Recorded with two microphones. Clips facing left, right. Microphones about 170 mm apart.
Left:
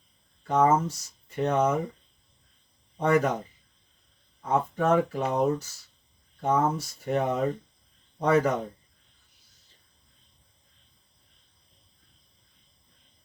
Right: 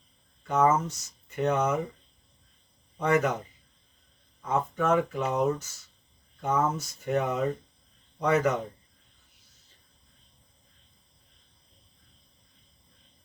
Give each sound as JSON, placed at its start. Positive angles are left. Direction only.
{"t": 0.4, "sound": "speech", "side_deg": 35}
{"t": 3.0, "sound": "speech", "side_deg": 35}
{"t": 4.4, "sound": "speech", "side_deg": 35}